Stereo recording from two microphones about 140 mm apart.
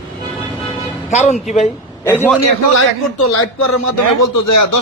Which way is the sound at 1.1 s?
55° left (ahead or behind).